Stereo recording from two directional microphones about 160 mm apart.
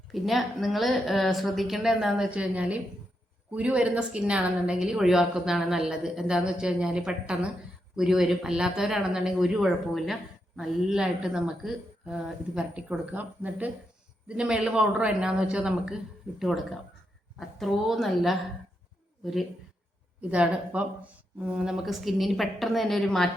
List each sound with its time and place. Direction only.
0.1 s a woman's voice: centre (ahead or behind)